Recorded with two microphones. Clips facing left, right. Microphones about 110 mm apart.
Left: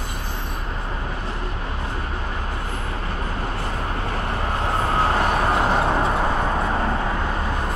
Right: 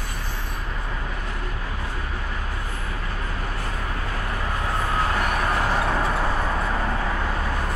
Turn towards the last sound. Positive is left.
turn(degrees=20)  # may be behind; listen again after turning